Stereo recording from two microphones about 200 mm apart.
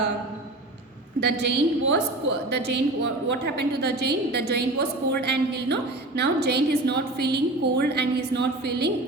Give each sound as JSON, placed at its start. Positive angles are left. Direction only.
{"t": 1.2, "sound": "a woman's voice", "side_deg": -60}